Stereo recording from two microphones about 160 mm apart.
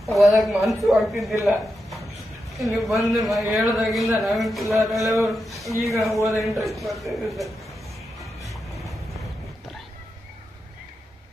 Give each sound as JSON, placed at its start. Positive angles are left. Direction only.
{"t": 0.0, "sound": "a woman's voice", "side_deg": 0}
{"t": 1.5, "sound": "a sound", "side_deg": 0}
{"t": 2.6, "sound": "a man's voice", "side_deg": 0}
{"t": 5.0, "sound": "a man's voice", "side_deg": -20}
{"t": 5.8, "sound": "a man's voice", "side_deg": 0}